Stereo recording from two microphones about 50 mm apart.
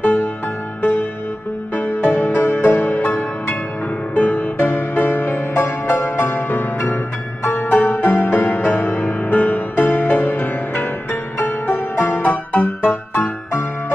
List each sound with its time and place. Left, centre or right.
0.0 s music: left
1.8 s music: left
5.5 s music: left
13.5 s music: left